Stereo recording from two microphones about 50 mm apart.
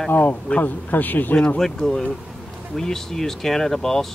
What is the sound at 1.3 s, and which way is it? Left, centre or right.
Speech, centre.